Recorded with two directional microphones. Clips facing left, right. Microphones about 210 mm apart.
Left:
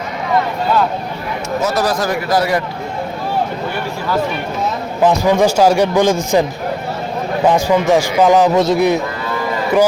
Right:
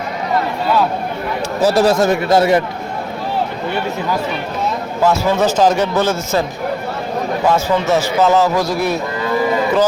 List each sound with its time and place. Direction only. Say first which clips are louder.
1.6 s a man's voice: right 6 dB; 25° right (ahead or behind)
5.0 s a man's voice: left 2 dB; 15° left (ahead or behind)
7.4 s a man's voice: left 3 dB; 15° left (ahead or behind)